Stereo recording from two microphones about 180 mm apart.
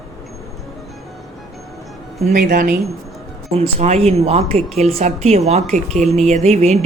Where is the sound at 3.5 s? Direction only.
35° right (ahead or behind).